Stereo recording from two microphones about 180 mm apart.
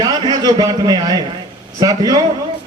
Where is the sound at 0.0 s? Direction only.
25° right (ahead or behind).